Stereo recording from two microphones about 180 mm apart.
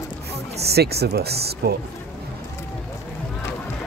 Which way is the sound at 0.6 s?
65° right (ahead or behind).